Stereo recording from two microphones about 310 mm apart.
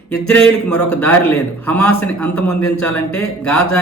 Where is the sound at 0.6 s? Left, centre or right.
Left.